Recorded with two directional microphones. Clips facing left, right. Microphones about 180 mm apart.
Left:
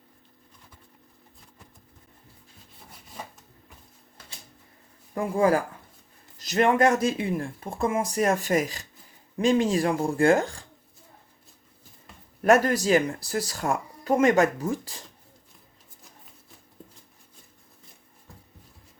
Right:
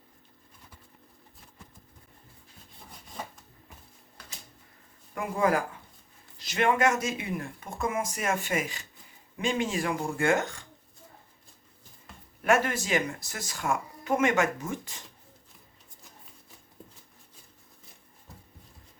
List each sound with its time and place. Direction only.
5.1 s speech: 30° left (ahead or behind)
12.4 s speech: 40° left (ahead or behind)